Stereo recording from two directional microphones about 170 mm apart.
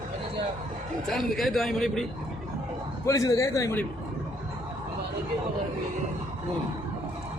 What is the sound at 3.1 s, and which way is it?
Speech, 20° left (ahead or behind).